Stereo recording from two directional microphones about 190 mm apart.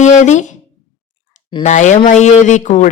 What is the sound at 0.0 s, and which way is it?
Speech, 40° left (ahead or behind).